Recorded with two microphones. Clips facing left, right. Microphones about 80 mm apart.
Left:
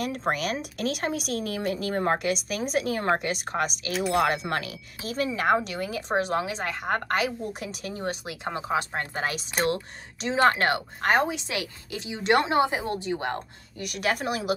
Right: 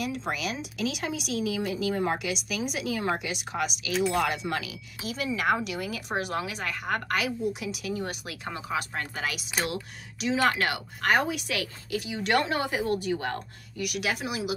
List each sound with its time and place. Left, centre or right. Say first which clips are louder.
0.0 s a woman's voice: left 3 dB; left